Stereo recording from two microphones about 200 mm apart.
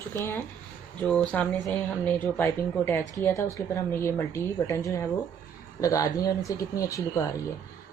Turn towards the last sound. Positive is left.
turn(degrees=15)  # may be behind; listen again after turning